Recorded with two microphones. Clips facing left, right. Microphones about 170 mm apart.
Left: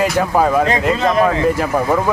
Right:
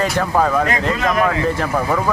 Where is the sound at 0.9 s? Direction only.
25° left (ahead or behind).